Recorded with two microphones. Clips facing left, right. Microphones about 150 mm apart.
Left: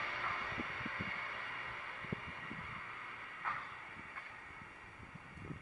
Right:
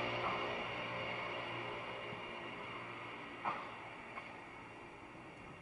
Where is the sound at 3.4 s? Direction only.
20° right (ahead or behind).